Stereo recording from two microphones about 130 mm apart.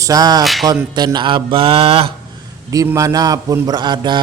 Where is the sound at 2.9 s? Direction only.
25° right (ahead or behind).